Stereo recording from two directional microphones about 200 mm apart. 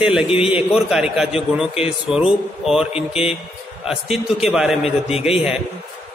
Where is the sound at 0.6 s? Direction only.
Centre (ahead or behind).